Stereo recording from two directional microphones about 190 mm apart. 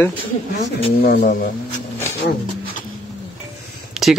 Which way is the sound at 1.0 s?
50° left (ahead or behind).